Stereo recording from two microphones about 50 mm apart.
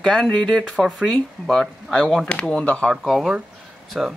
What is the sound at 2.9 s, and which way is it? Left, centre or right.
Speech, centre.